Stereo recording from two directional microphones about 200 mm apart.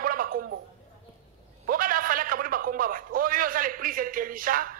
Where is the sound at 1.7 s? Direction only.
45° right (ahead or behind).